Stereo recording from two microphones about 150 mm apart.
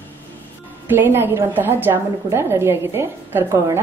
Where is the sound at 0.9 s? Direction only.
15° right (ahead or behind).